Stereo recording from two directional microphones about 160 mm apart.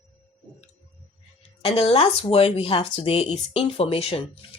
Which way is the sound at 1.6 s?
35° left (ahead or behind).